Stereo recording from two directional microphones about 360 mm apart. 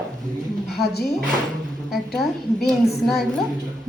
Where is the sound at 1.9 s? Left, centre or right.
Centre.